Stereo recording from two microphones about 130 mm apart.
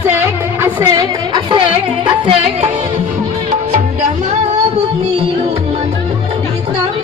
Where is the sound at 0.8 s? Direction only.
35° right (ahead or behind).